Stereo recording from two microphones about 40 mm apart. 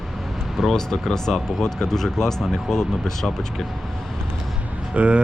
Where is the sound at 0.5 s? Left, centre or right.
Centre.